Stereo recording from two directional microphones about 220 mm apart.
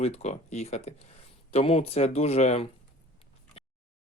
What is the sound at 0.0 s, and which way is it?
Speech, 30° left (ahead or behind).